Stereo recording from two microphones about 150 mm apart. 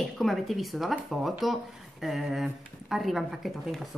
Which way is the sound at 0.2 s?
Centre (ahead or behind).